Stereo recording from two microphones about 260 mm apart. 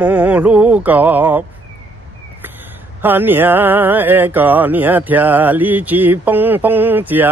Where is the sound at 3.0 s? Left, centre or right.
Centre.